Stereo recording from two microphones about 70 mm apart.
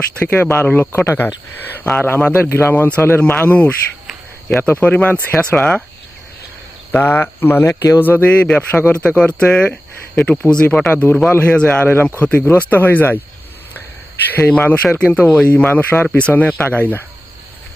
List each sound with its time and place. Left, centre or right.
0.2 s speech: left
5.4 s speech: centre
6.9 s speech: left
8.0 s speech: left
14.3 s speech: left